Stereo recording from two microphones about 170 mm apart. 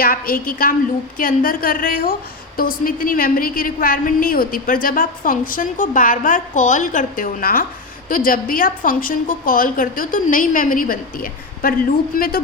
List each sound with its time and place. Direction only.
0.0 s a woman's voice: 55° left (ahead or behind)